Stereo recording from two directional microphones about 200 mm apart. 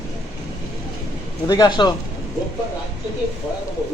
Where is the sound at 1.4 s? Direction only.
20° left (ahead or behind).